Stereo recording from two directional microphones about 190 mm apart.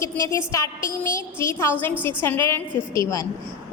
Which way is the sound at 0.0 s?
15° left (ahead or behind).